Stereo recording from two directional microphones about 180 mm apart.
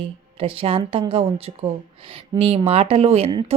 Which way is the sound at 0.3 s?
30° right (ahead or behind).